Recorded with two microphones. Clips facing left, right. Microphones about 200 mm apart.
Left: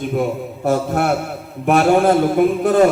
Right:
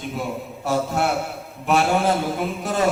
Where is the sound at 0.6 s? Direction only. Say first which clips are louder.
Left 5 dB; 55° left (ahead or behind).